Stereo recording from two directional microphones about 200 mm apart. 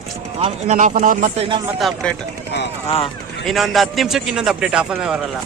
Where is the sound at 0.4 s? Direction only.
35° right (ahead or behind).